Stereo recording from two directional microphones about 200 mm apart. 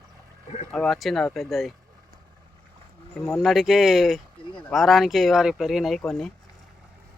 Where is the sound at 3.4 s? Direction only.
Centre (ahead or behind).